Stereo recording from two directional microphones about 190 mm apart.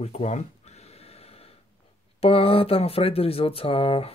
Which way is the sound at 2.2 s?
30° left (ahead or behind).